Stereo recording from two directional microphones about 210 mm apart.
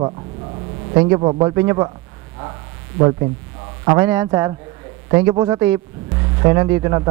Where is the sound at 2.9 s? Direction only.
30° right (ahead or behind).